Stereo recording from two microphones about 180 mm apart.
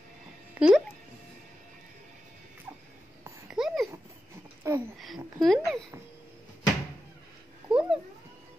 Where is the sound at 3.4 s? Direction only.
5° right (ahead or behind).